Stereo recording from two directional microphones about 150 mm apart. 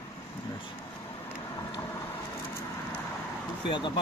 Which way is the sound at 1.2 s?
15° left (ahead or behind).